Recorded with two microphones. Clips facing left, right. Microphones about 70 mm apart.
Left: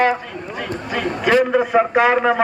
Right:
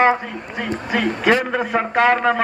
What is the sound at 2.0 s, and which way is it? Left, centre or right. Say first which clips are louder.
Speech: right 3 dB; centre.